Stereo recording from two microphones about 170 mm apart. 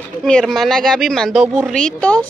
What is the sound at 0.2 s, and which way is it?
Speech, 5° left (ahead or behind).